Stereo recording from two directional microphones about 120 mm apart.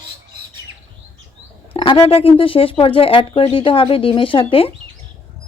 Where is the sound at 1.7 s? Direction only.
50° left (ahead or behind).